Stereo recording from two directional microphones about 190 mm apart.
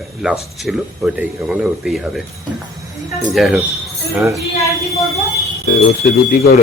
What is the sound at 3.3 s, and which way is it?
Speech, centre (ahead or behind).